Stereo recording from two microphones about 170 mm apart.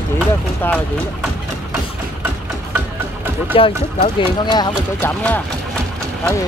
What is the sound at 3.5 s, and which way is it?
Speech, 30° left (ahead or behind).